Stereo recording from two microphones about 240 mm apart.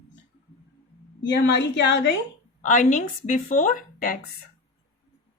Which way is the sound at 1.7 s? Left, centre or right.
Left.